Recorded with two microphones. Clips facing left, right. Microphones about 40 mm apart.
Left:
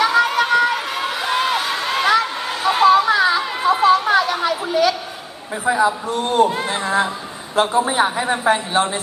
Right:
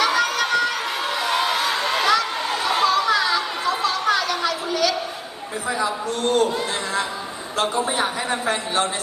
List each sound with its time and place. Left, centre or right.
0.0 s a sound: left
2.6 s chatter: centre
5.6 s a man's voice: left